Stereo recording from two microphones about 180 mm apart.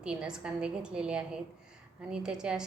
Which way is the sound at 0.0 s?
5° right (ahead or behind).